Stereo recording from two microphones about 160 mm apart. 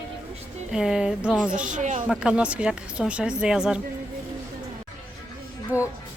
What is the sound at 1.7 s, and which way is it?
Speech, 50° right (ahead or behind).